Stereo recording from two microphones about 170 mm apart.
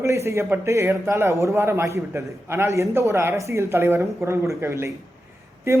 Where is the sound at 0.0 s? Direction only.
15° right (ahead or behind).